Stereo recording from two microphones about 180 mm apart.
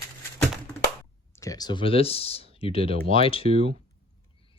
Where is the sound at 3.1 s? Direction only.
30° left (ahead or behind).